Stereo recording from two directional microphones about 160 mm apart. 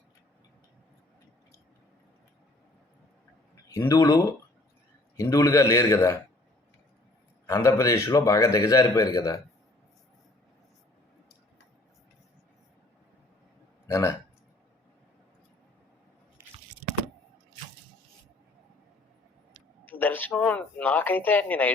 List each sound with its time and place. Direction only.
3.8 s a man's voice: 20° left (ahead or behind)
7.4 s a man's voice: 20° left (ahead or behind)
13.8 s a man's voice: 20° left (ahead or behind)
19.8 s speech: 10° left (ahead or behind)